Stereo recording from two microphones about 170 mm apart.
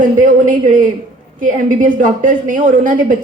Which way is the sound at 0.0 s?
50° right (ahead or behind).